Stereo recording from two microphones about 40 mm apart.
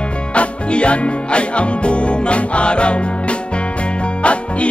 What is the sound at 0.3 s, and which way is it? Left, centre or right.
Music, left.